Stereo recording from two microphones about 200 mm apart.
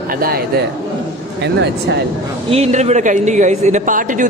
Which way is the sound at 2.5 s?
30° right (ahead or behind).